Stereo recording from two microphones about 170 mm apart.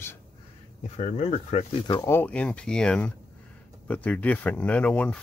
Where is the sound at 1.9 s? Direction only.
25° left (ahead or behind).